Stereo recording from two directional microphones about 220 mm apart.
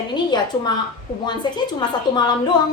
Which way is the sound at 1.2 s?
20° left (ahead or behind).